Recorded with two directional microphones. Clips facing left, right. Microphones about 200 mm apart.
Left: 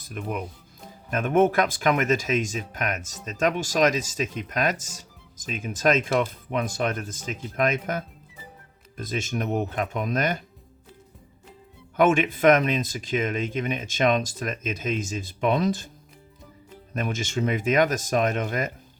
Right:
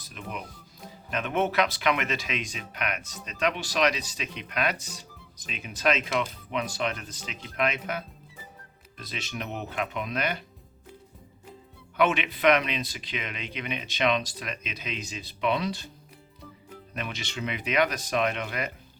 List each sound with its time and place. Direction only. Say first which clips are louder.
0.1 s speech: left 7 dB; 50° left (ahead or behind)
11.9 s speech: left 5 dB; 45° left (ahead or behind)
16.9 s speech: left 8 dB; 45° left (ahead or behind)